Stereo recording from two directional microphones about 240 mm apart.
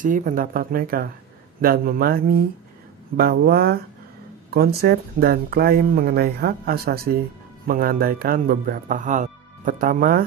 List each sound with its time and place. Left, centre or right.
0.0 s speech: right